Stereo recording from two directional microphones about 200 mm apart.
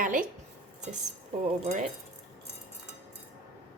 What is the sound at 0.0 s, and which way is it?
Speech, 45° right (ahead or behind).